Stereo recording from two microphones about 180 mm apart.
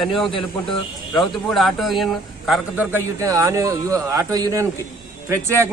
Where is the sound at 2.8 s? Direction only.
15° right (ahead or behind).